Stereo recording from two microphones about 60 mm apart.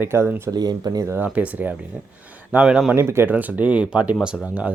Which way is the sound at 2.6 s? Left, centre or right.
Centre.